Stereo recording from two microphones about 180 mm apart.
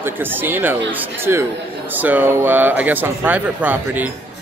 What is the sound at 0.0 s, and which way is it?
Speech, 10° right (ahead or behind).